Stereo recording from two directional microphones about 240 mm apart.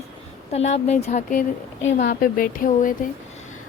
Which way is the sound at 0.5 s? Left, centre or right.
Left.